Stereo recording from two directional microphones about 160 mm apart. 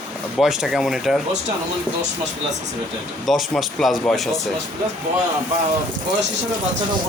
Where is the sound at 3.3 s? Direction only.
Centre (ahead or behind).